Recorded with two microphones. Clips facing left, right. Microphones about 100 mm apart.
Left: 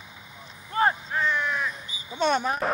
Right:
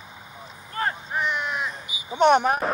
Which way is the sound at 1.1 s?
20° right (ahead or behind).